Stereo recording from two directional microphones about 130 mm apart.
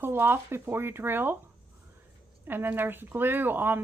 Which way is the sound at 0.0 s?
15° right (ahead or behind).